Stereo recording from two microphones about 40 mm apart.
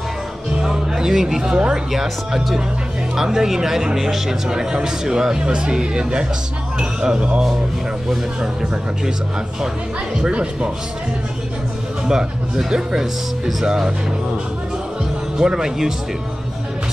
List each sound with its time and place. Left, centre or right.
0.6 s speech: centre
1.5 s speech: right
1.9 s a man's voice: centre
10.3 s speech: right
12.1 s a man's voice: centre
13.7 s a man's voice: centre
15.3 s a man's voice: centre